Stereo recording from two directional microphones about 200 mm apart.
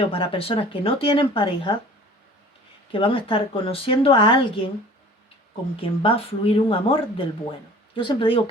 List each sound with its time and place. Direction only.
0.0 s a woman's voice: 25° left (ahead or behind)
2.9 s a woman's voice: 25° left (ahead or behind)
5.8 s a woman's voice: 25° left (ahead or behind)